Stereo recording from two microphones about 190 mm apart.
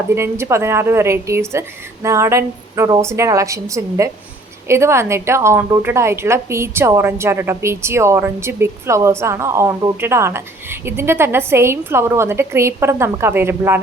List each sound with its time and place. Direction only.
0.1 s a woman's voice: 15° right (ahead or behind)